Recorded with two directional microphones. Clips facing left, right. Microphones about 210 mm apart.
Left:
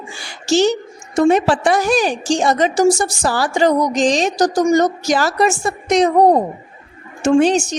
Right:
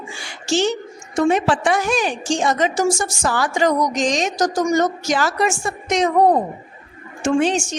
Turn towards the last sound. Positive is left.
turn(degrees=35)  # may be behind; listen again after turning